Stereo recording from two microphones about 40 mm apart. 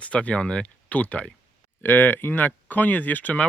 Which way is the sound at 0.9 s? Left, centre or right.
Left.